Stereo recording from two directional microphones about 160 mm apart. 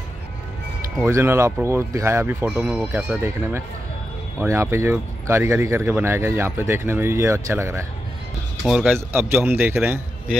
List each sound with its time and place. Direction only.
1.0 s speech: 15° right (ahead or behind)
2.5 s speech: 5° right (ahead or behind)
8.6 s speech: 5° right (ahead or behind)
8.9 s speech: 15° right (ahead or behind)